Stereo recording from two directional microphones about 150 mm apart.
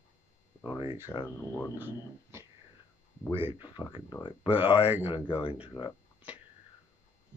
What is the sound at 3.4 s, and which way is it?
Speech, 30° left (ahead or behind).